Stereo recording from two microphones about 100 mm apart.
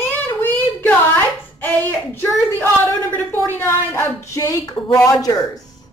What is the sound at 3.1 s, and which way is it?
Speech, 20° left (ahead or behind).